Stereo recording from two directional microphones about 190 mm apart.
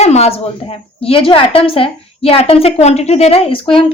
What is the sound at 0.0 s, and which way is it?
A woman's voice, 35° left (ahead or behind).